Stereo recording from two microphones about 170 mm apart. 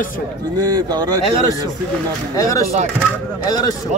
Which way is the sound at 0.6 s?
25° right (ahead or behind).